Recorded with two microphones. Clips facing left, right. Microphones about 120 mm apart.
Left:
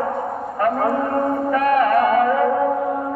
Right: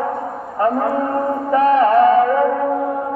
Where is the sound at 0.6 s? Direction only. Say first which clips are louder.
Right 2 dB; 25° right (ahead or behind).